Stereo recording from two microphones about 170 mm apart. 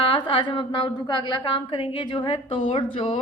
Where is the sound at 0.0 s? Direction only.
30° left (ahead or behind).